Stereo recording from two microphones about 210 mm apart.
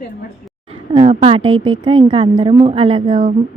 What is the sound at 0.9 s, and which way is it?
A woman's voice, 25° right (ahead or behind).